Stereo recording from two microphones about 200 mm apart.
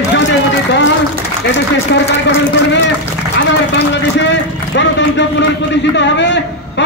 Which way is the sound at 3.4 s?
60° left (ahead or behind).